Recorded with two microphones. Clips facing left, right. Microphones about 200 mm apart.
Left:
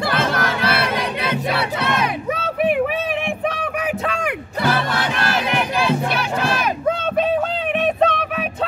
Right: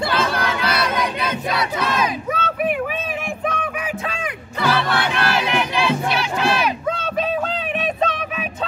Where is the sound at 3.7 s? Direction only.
60° left (ahead or behind).